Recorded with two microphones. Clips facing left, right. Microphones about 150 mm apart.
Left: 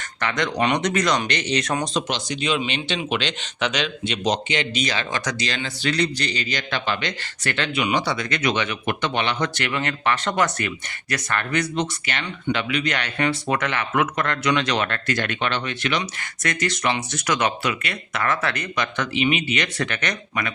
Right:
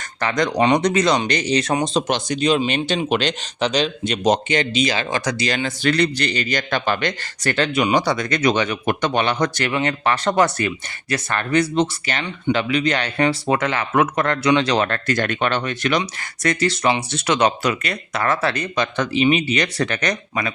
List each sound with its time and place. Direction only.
0.2 s a man's voice: 35° right (ahead or behind)
2.0 s speech: 50° right (ahead or behind)
4.7 s a man's voice: 35° right (ahead or behind)
5.6 s a man's voice: 55° right (ahead or behind); by 17.5 s 30° right (ahead or behind)
17.6 s a man's voice: 40° right (ahead or behind)